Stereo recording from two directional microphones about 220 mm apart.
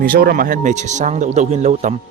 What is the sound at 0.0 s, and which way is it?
Speech, 40° right (ahead or behind).